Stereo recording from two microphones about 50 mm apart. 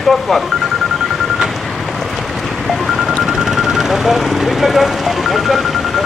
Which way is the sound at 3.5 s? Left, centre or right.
Centre.